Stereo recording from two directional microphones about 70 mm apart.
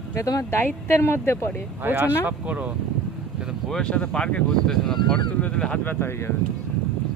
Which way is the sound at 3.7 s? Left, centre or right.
Centre.